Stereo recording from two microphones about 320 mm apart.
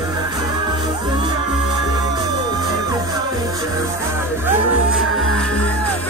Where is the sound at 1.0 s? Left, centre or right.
Centre.